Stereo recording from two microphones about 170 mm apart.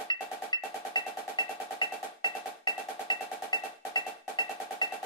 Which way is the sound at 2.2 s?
25° left (ahead or behind).